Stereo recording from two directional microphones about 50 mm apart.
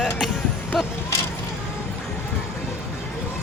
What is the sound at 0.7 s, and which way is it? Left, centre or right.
Speech, centre.